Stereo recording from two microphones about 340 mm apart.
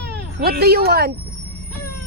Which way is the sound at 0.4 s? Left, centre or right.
Right.